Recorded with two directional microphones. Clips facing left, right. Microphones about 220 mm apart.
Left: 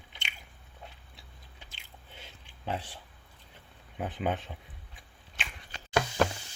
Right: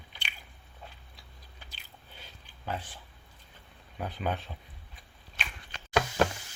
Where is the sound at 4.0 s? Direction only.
20° left (ahead or behind).